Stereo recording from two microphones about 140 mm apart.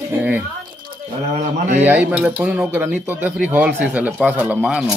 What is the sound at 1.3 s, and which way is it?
Speech, 60° right (ahead or behind).